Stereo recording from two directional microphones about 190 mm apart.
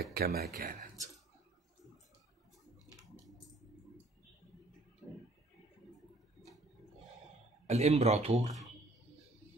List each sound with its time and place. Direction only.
0.0 s speech: 55° right (ahead or behind)
7.6 s speech: 35° right (ahead or behind)